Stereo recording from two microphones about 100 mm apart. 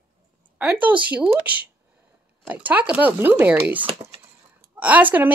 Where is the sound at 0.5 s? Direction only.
15° right (ahead or behind).